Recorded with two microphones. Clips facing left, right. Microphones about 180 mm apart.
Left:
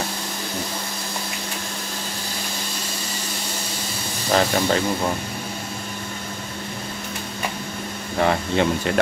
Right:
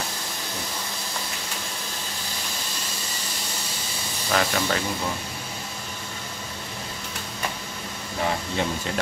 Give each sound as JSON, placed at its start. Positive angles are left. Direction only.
{"t": 4.3, "sound": "speech", "side_deg": 35}
{"t": 8.2, "sound": "speech", "side_deg": 65}